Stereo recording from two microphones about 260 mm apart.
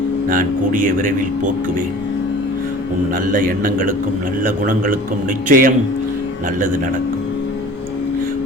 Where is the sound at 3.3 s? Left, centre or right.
Right.